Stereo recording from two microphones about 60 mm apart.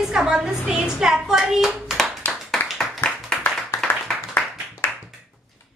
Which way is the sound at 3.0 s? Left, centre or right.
Left.